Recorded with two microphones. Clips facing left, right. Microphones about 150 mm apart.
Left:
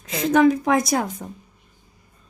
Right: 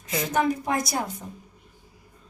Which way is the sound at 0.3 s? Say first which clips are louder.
Left 8 dB; 90° left.